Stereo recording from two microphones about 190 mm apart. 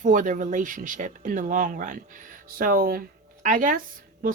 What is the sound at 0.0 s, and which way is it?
Speech, 45° right (ahead or behind).